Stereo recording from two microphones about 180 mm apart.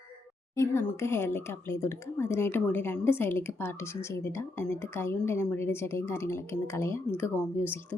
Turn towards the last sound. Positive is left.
turn(degrees=10)  # may be behind; listen again after turning